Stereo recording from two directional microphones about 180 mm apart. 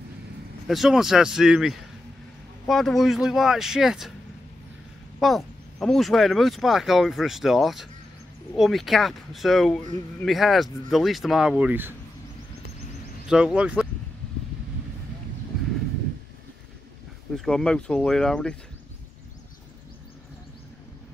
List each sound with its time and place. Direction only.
0.7 s speech: centre (ahead or behind)
5.2 s speech: centre (ahead or behind)
13.3 s speech: 5° right (ahead or behind)
17.4 s speech: 5° left (ahead or behind)